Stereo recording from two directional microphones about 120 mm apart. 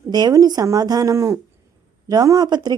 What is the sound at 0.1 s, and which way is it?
A woman's voice, 35° right (ahead or behind).